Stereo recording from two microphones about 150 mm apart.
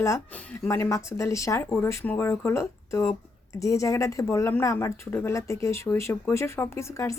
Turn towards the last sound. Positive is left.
turn(degrees=20)  # may be behind; listen again after turning